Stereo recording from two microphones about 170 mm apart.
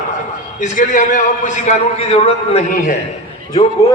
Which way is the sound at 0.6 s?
50° left (ahead or behind).